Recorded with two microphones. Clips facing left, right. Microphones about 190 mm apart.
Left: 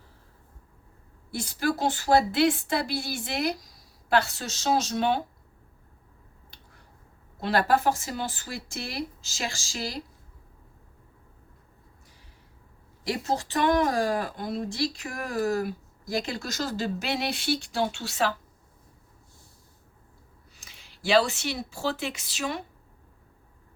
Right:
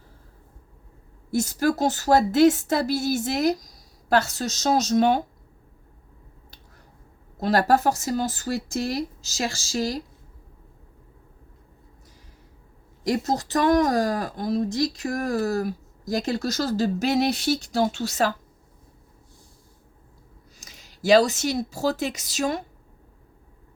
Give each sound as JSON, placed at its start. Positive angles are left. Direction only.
{"t": 1.3, "sound": "speech", "side_deg": -45}
{"t": 7.3, "sound": "speech", "side_deg": -40}
{"t": 13.1, "sound": "speech", "side_deg": -40}
{"t": 20.6, "sound": "speech", "side_deg": -40}